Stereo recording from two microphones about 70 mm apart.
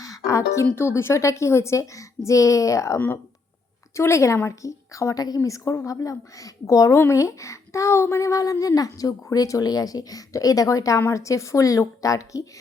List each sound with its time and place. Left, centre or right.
0.0 s speech: left